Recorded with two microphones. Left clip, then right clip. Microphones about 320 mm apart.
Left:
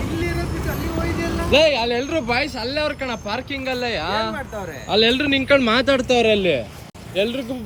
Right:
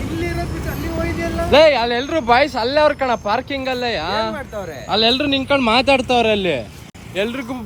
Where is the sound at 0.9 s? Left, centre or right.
Centre.